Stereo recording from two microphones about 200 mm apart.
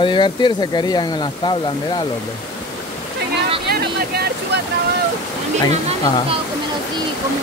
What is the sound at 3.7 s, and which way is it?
Vehicle, 50° right (ahead or behind).